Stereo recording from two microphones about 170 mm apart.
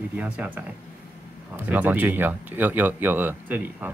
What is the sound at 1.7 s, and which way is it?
Speech, 10° right (ahead or behind).